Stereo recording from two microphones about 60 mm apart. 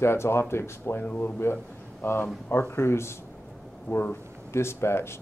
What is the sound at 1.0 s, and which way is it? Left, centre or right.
Speech, left.